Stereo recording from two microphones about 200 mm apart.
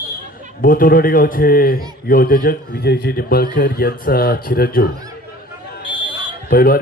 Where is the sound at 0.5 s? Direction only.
45° left (ahead or behind).